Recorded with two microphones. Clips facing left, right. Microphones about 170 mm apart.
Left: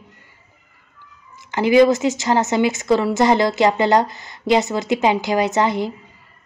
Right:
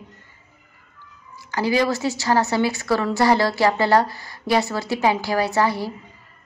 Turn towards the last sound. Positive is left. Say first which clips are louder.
# left 2 dB
turn(degrees=20)  # may be behind; listen again after turning